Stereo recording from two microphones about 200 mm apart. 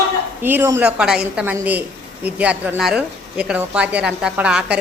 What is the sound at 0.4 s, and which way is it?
A woman's voice, 10° right (ahead or behind).